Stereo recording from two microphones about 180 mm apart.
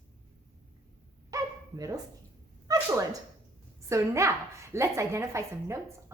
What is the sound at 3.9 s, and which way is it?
Speech, 15° right (ahead or behind).